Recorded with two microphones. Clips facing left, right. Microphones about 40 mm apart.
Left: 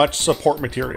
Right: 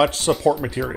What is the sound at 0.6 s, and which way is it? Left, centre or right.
Speech, left.